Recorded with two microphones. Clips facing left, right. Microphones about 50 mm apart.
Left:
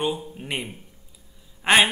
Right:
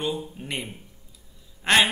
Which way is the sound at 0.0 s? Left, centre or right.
Centre.